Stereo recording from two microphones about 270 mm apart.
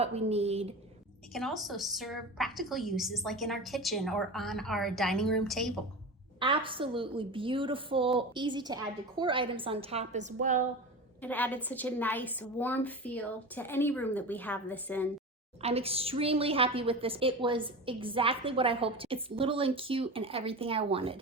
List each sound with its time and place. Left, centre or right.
0.0 s a woman's voice: right
1.3 s a woman's voice: centre
6.4 s a woman's voice: centre
11.2 s a woman's voice: centre
15.6 s a woman's voice: right